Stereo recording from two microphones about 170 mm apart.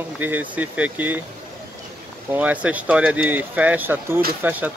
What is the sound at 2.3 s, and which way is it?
Speech, 10° right (ahead or behind).